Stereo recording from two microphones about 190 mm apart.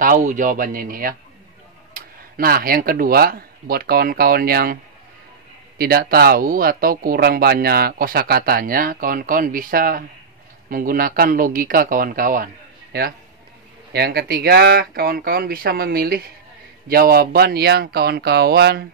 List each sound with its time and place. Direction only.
0.0 s speech: 45° right (ahead or behind)
5.8 s speech: 55° right (ahead or behind)
13.9 s speech: 55° right (ahead or behind)